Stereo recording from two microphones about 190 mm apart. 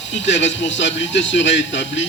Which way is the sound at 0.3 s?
70° left (ahead or behind).